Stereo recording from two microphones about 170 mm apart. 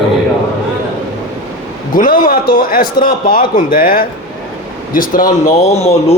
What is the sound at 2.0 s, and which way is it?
A man's voice, 55° left (ahead or behind).